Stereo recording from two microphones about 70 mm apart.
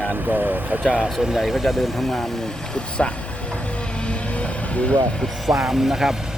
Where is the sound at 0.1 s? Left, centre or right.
Right.